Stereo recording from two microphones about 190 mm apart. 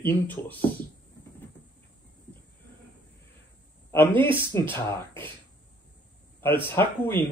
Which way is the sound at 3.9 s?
10° left (ahead or behind).